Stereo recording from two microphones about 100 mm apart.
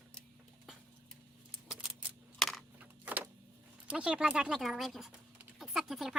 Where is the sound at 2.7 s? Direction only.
15° right (ahead or behind).